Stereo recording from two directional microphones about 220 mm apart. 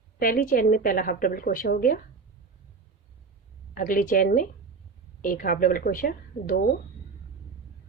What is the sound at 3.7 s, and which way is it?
A woman's voice, 40° left (ahead or behind).